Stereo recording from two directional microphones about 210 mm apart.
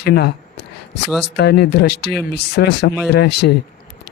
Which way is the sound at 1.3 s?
50° left (ahead or behind).